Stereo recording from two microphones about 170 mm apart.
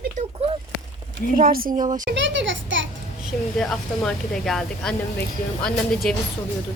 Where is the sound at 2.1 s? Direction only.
90° right.